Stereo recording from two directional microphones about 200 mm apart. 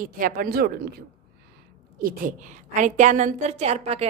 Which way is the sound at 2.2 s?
40° right (ahead or behind).